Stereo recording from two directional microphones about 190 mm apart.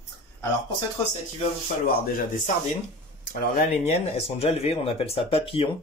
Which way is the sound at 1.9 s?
50° left (ahead or behind).